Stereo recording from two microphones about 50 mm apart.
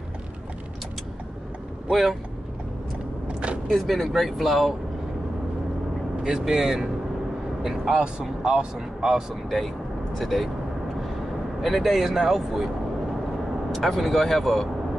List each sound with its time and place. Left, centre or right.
1.9 s speech: centre
3.3 s vehicle: right
3.7 s speech: centre
6.2 s speech: centre
10.1 s speech: centre
11.6 s speech: centre